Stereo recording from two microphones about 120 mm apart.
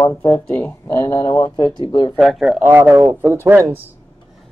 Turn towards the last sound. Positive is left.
turn(degrees=-20)  # may be behind; listen again after turning